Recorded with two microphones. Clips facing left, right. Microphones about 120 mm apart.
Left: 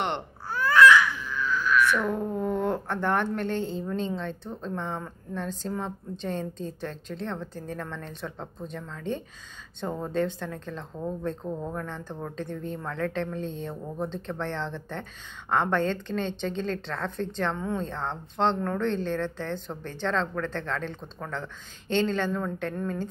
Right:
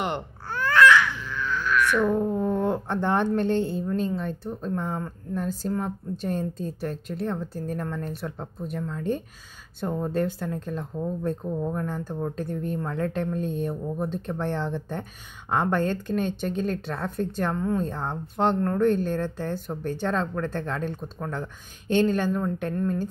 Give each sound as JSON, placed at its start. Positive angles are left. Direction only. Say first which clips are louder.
{"t": 1.9, "sound": "speech", "louder": "right 4 dB", "side_deg": -15}
{"t": 3.8, "sound": "speech", "louder": "right 3 dB", "side_deg": -5}